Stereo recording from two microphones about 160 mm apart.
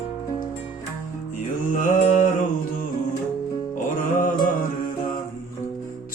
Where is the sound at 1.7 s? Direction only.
55° left (ahead or behind).